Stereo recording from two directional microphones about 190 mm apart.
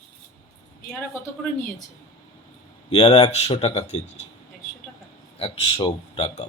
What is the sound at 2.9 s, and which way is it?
Speech, 35° left (ahead or behind).